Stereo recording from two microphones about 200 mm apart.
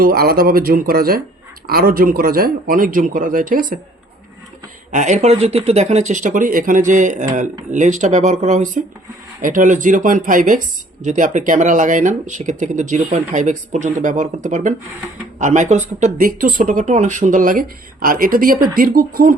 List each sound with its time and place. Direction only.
0.0 s speech: 50° right (ahead or behind)
4.9 s speech: 40° right (ahead or behind)